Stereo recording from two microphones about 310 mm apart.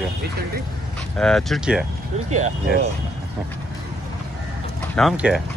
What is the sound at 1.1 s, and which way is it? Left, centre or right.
Speech, centre.